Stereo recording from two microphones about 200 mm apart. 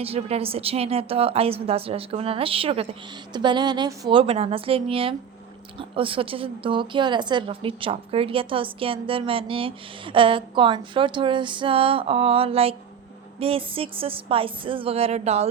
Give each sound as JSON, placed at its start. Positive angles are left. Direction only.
{"t": 0.0, "sound": "a woman's voice", "side_deg": -30}